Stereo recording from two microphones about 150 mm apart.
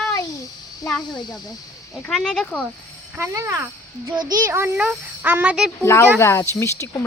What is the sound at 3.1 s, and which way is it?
A child's voice, 20° right (ahead or behind).